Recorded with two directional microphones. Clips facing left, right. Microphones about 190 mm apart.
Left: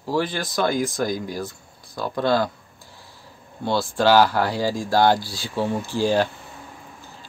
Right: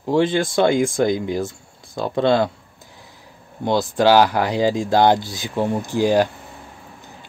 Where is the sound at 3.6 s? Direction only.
20° right (ahead or behind).